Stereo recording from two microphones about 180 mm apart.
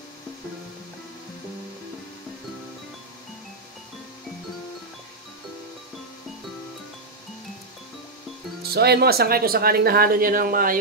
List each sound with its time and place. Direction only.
8.7 s speech: 60° right (ahead or behind)